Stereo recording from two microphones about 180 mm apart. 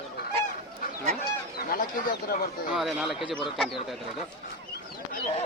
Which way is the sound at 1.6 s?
55° left (ahead or behind).